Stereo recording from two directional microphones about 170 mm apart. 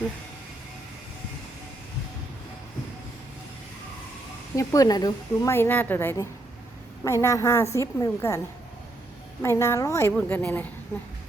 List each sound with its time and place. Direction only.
4.5 s a woman's voice: 20° left (ahead or behind)
9.4 s a woman's voice: 15° left (ahead or behind)